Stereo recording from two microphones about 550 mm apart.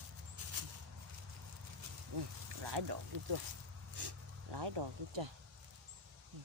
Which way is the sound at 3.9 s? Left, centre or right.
Right.